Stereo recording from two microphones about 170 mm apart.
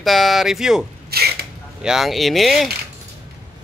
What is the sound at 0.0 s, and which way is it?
Speech, centre (ahead or behind).